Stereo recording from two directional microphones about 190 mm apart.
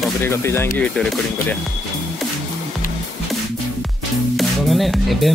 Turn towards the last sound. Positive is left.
turn(degrees=0)  # may be behind; listen again after turning